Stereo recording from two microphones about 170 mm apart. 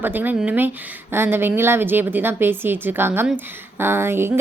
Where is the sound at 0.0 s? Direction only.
10° right (ahead or behind).